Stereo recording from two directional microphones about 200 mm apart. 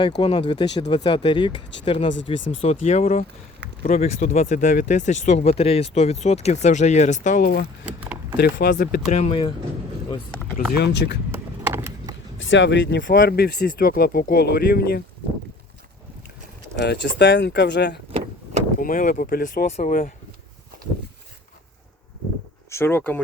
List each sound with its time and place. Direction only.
0.2 s speech: 25° left (ahead or behind); by 7.6 s 45° left (ahead or behind)
7.9 s a sound: 5° right (ahead or behind)
8.4 s speech: 50° left (ahead or behind)
9.1 s speech: 30° left (ahead or behind)
10.8 s speech: 55° left (ahead or behind)
11.3 s a sound: 10° right (ahead or behind)
12.4 s speech: 65° left (ahead or behind)
13.1 s speech: 50° left (ahead or behind)
16.8 s speech: 60° left (ahead or behind)
18.8 s speech: 45° left (ahead or behind)
22.7 s speech: 10° left (ahead or behind)